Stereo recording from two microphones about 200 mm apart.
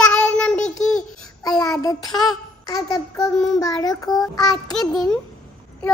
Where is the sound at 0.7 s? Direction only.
90° left.